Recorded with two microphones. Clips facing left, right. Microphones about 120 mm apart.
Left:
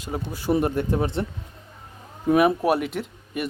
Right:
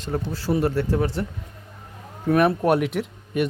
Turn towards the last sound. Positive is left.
turn(degrees=0)  # may be behind; listen again after turning